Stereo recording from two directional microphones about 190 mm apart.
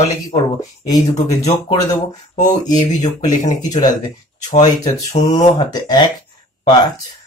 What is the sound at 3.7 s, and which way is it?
Speech, 20° left (ahead or behind).